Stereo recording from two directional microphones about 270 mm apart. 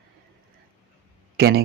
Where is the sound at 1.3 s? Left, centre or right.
Right.